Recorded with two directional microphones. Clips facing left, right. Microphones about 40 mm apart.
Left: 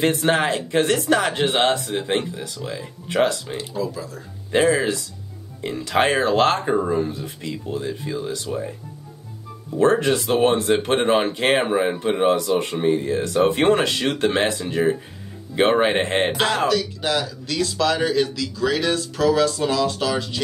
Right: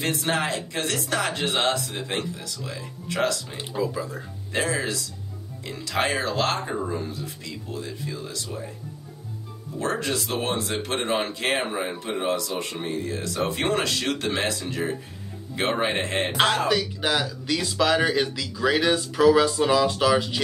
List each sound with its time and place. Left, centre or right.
0.0 s speech: left
3.5 s speech: right
4.5 s speech: left
9.8 s speech: left
16.6 s speech: centre